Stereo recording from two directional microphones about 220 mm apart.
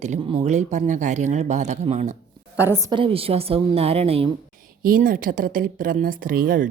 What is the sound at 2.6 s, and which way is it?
A woman's voice, 10° right (ahead or behind).